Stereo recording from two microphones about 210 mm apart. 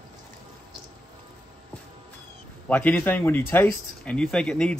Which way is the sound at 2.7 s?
5° left (ahead or behind).